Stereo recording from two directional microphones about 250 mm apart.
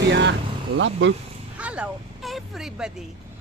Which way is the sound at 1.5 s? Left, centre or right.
Centre.